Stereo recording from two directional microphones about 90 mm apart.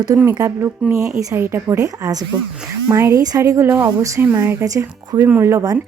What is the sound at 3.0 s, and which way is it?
Speech, 30° right (ahead or behind).